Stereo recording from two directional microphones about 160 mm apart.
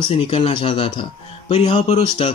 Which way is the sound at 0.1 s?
35° left (ahead or behind).